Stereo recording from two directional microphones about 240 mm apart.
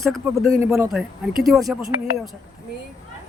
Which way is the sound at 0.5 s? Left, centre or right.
Centre.